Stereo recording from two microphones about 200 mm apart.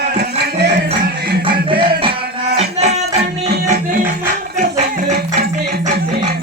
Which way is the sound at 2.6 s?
35° right (ahead or behind).